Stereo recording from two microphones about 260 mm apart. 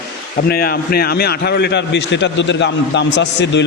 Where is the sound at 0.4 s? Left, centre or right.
Left.